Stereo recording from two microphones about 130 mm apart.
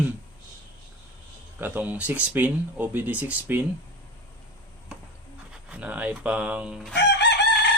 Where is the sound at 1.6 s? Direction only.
15° right (ahead or behind).